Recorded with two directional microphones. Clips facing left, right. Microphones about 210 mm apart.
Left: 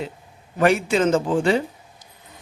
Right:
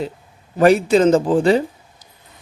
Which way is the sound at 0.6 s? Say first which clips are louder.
Right 6 dB; 35° right (ahead or behind).